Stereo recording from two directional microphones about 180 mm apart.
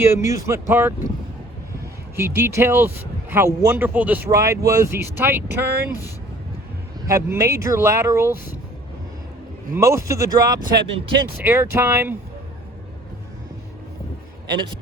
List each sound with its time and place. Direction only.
0.0 s speech: 15° right (ahead or behind)
2.1 s speech: 15° right (ahead or behind)
7.1 s speech: 15° right (ahead or behind)
9.7 s speech: 15° right (ahead or behind)